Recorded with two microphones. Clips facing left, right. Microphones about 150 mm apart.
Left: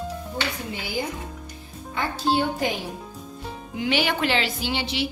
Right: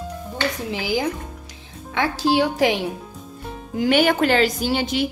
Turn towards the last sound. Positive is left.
turn(degrees=-45)  # may be behind; listen again after turning